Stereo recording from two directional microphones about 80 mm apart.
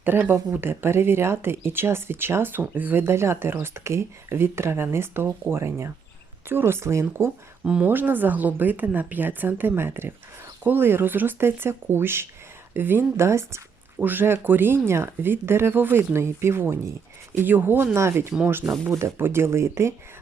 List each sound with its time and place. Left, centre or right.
0.0 s speech: right
7.6 s speech: centre
7.9 s a woman's voice: right